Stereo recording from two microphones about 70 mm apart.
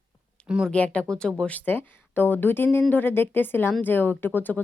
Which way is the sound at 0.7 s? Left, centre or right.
Centre.